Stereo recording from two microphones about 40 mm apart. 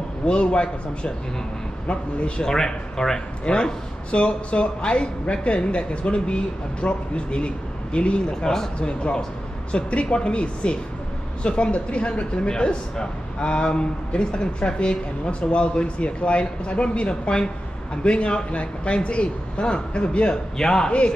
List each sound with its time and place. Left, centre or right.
0.3 s a man's voice: left
8.3 s a man's voice: centre
8.7 s a man's voice: left
12.4 s a man's voice: centre
20.5 s a man's voice: centre